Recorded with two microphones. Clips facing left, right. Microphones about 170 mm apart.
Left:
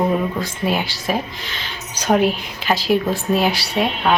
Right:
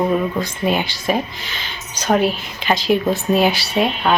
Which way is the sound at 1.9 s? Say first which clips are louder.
Even; 10° left (ahead or behind).